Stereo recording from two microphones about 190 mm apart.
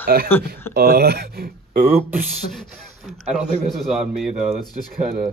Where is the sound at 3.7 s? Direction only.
Centre (ahead or behind).